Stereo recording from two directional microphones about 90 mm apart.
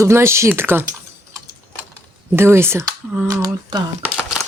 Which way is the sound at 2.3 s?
25° right (ahead or behind).